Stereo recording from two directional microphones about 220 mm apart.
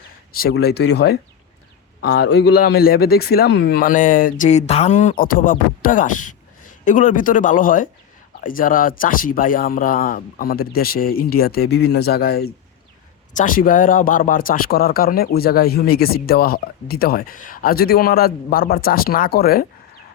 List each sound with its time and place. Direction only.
0.3 s a man's voice: 45° left (ahead or behind)